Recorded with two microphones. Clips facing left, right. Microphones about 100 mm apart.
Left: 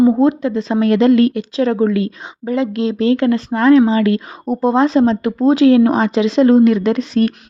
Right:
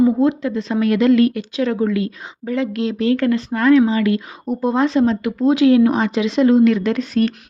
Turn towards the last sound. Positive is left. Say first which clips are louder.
# left 3 dB
turn(degrees=20)  # may be behind; listen again after turning